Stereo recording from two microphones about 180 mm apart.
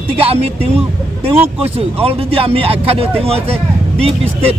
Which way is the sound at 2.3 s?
30° right (ahead or behind).